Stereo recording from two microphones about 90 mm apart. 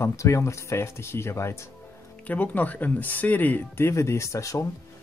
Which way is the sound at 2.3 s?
20° left (ahead or behind).